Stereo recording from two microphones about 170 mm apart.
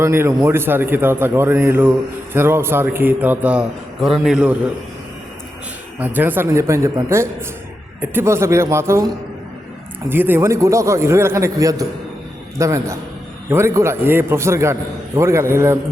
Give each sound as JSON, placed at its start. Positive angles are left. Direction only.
{"t": 0.0, "sound": "a man's voice", "side_deg": -15}
{"t": 6.0, "sound": "a man's voice", "side_deg": -10}
{"t": 10.1, "sound": "a man's voice", "side_deg": -10}